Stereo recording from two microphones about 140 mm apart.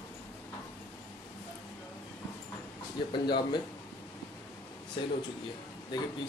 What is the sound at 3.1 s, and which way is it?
Speech, 35° left (ahead or behind).